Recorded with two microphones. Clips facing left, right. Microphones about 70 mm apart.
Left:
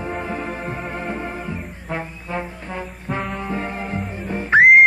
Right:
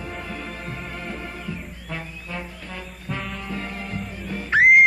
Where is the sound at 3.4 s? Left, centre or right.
Left.